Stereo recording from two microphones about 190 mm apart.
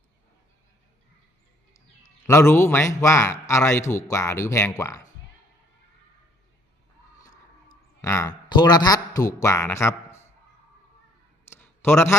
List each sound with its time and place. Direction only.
2.2 s a man's voice: 15° left (ahead or behind)
8.0 s a man's voice: 15° left (ahead or behind)
11.4 s a sound: 10° left (ahead or behind)